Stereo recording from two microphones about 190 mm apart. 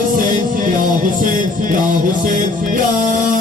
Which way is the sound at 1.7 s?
45° right (ahead or behind).